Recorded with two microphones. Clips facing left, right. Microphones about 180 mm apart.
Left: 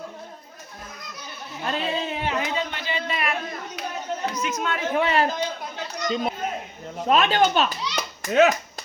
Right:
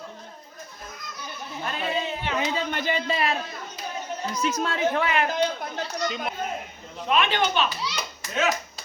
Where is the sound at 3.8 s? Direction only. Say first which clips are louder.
Left 2 dB; 75° left (ahead or behind).